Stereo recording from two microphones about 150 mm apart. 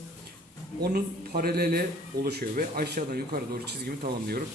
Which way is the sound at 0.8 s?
90° right.